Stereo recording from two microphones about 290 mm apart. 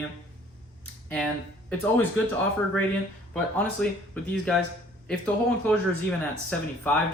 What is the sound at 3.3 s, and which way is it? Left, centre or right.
Speech, centre.